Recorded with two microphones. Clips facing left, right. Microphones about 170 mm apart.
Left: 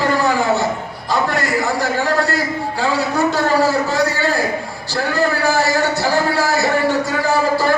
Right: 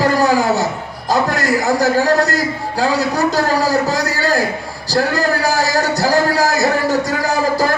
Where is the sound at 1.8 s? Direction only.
40° right (ahead or behind).